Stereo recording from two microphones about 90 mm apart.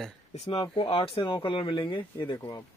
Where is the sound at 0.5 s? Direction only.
90° left; by 2.0 s 70° left (ahead or behind).